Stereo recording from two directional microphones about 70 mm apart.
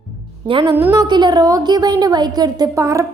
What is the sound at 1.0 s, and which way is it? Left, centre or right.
A woman's voice, right.